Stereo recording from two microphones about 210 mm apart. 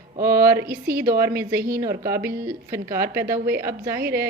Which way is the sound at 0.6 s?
45° right (ahead or behind).